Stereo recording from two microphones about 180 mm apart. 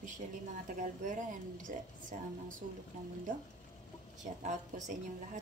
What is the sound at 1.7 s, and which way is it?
Speech, 50° right (ahead or behind).